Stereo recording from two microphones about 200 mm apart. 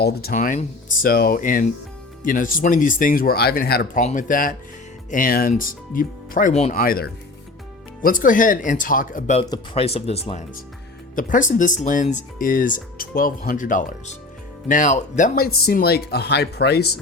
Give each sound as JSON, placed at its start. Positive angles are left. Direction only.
{"t": 0.0, "sound": "speech", "side_deg": 50}
{"t": 6.7, "sound": "speech", "side_deg": 45}
{"t": 11.1, "sound": "speech", "side_deg": 40}